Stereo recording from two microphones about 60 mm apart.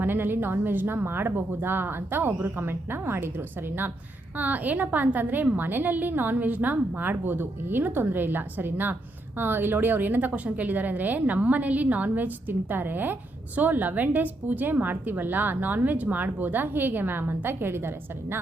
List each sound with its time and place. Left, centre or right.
0.0 s a woman's voice: right
4.4 s a woman's voice: right